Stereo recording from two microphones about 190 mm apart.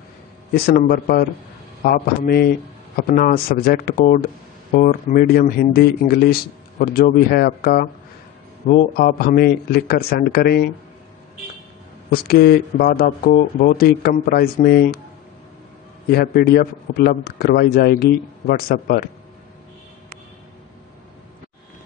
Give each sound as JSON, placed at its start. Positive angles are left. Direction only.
{"t": 0.5, "sound": "speech", "side_deg": 55}
{"t": 12.1, "sound": "speech", "side_deg": 55}
{"t": 16.1, "sound": "speech", "side_deg": 55}